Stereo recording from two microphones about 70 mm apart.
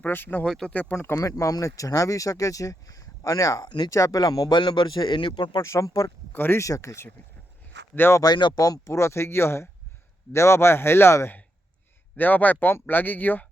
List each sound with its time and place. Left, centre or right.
0.0 s speech: left
0.4 s speech: centre
0.7 s speech: left
1.1 s speech: left
3.8 s speech: left
5.6 s speech: left
6.3 s speech: left
6.6 s speech: left
7.9 s a man's voice: left
8.2 s a man's voice: left
12.1 s speech: left